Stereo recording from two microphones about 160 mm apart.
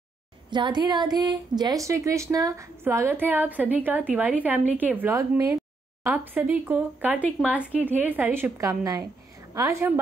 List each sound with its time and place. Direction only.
0.5 s a woman's voice: 30° right (ahead or behind)